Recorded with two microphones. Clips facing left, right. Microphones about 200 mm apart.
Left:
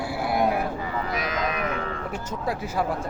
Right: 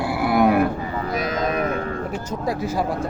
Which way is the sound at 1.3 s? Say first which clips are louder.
Right 7 dB; 30° right (ahead or behind).